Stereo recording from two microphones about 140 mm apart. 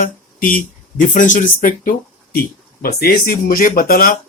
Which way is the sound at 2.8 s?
90° left.